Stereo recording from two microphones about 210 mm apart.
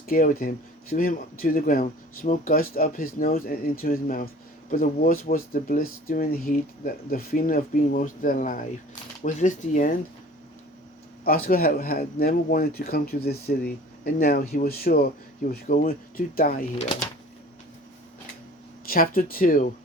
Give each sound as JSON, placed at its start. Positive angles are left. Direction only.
{"t": 0.0, "sound": "speech", "side_deg": 40}
{"t": 11.3, "sound": "speech", "side_deg": 45}
{"t": 18.9, "sound": "speech", "side_deg": 45}